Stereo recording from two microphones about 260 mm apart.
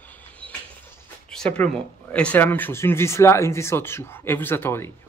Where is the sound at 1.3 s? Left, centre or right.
Centre.